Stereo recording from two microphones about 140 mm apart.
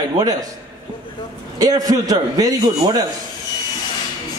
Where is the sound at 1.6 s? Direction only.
25° right (ahead or behind).